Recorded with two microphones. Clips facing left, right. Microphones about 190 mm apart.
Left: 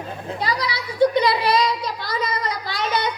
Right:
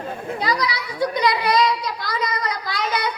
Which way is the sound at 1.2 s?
30° left (ahead or behind).